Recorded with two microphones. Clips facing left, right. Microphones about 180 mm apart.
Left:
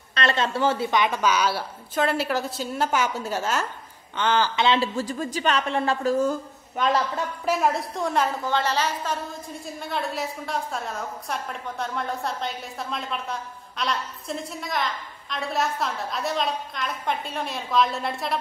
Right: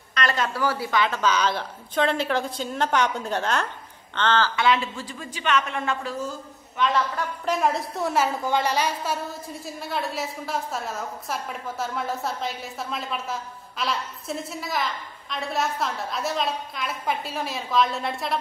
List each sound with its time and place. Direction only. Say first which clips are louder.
0.1 s a woman's voice: left 1 dB; 25° left (ahead or behind)
4.7 s a woman's voice: left 6 dB; 40° left (ahead or behind)
6.8 s a woman's voice: left 1 dB; 45° left (ahead or behind)
7.4 s a woman's voice: left 1 dB; 5° left (ahead or behind)